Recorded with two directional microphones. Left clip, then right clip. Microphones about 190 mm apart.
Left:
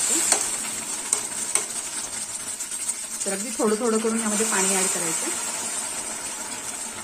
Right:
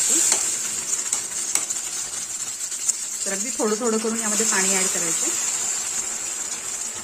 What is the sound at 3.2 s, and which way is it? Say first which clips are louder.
Speech: even; 15° right (ahead or behind).